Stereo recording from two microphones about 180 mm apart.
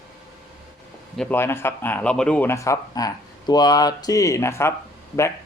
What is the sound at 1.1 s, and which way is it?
Speech, 5° left (ahead or behind).